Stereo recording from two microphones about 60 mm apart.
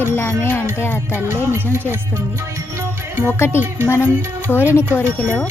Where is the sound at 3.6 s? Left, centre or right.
Right.